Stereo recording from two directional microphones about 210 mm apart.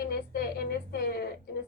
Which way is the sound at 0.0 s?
45° left (ahead or behind).